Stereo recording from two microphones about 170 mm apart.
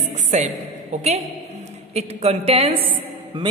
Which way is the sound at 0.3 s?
45° right (ahead or behind).